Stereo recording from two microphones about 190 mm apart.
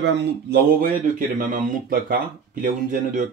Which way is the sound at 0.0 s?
65° right (ahead or behind).